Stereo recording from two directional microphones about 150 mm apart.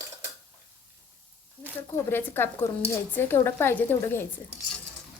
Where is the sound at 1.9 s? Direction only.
15° left (ahead or behind).